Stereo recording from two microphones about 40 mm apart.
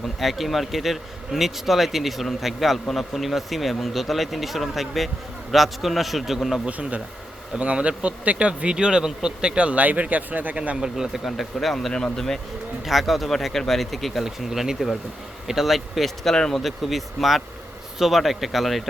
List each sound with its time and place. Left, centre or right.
0.0 s speech: centre
6.7 s speech: right
10.5 s speech: right
10.8 s speech: centre
11.3 s speech: centre
12.8 s speech: centre
16.6 s speech: centre